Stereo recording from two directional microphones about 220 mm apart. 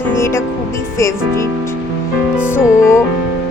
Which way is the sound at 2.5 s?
10° left (ahead or behind).